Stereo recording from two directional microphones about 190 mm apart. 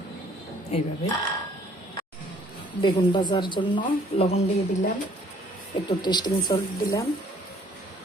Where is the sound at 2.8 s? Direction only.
25° left (ahead or behind).